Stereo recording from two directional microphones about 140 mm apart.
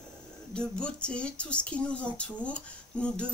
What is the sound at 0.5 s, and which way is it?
Speech, 5° left (ahead or behind).